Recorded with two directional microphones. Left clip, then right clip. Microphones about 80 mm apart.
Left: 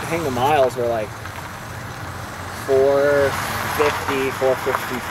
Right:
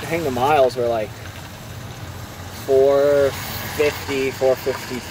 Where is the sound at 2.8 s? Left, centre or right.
Left.